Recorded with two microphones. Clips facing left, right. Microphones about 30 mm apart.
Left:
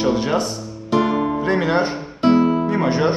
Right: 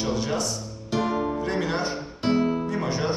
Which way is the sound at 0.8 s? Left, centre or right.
Left.